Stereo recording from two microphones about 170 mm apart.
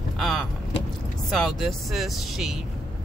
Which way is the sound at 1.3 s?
Centre (ahead or behind).